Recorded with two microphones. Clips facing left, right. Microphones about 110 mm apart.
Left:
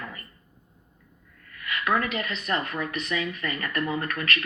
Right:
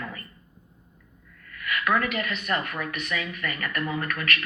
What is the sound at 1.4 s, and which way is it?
Speech, 30° left (ahead or behind).